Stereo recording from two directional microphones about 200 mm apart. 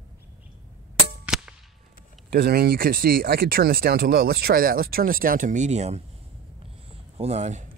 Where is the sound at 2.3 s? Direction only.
50° right (ahead or behind); by 6.0 s 35° right (ahead or behind).